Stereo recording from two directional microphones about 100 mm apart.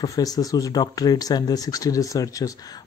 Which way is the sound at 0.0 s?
40° left (ahead or behind).